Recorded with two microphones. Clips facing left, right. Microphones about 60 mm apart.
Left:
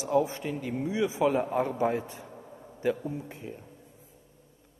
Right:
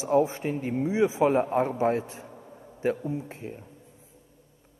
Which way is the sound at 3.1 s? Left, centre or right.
Right.